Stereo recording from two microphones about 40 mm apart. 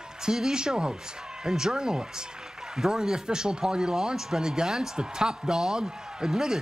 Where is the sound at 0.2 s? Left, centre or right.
Centre.